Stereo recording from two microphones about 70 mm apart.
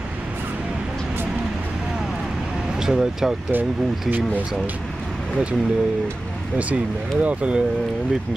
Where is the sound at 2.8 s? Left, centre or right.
Centre.